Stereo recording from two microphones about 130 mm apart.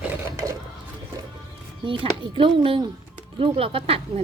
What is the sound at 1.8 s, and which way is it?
Speech, 40° right (ahead or behind).